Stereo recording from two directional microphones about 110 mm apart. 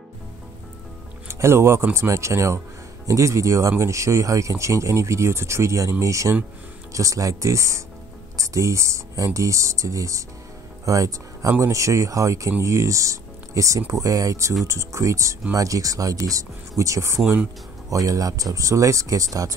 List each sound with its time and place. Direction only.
1.4 s speech: 25° right (ahead or behind)